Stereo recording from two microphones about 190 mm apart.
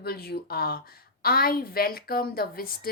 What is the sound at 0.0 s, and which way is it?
A woman's voice, 55° left (ahead or behind).